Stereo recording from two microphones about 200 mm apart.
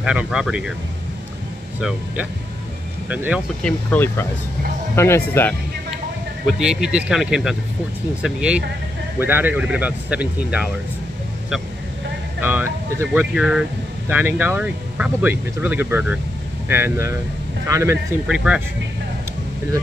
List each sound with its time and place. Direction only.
0.0 s speech: 5° right (ahead or behind)
1.8 s speech: 5° right (ahead or behind)
3.6 s speech: 10° left (ahead or behind)
6.6 s speech: 5° right (ahead or behind)
12.4 s speech: 10° right (ahead or behind)
18.2 s speech: 5° right (ahead or behind)